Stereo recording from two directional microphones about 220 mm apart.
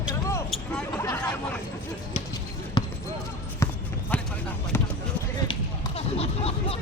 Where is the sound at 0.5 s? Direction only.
5° left (ahead or behind).